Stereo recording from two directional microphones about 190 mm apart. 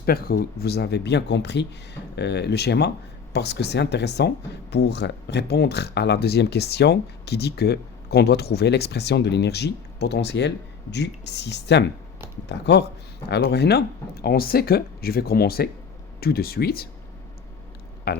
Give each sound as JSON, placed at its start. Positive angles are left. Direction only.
{"t": 0.0, "sound": "speech", "side_deg": 50}
{"t": 18.1, "sound": "speech", "side_deg": 55}